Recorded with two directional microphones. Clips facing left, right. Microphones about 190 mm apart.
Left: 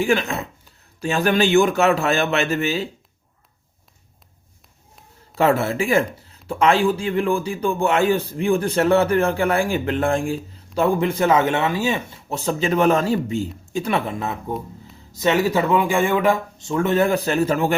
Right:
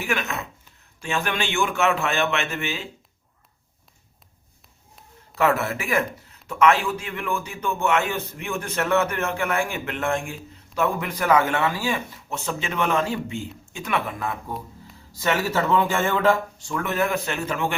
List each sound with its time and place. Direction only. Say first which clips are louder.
0.0 s a man's voice: left 7 dB; 30° left (ahead or behind)
5.3 s a man's voice: left 4 dB; 30° left (ahead or behind)